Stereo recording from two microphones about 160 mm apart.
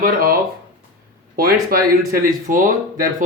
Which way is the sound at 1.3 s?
65° right (ahead or behind).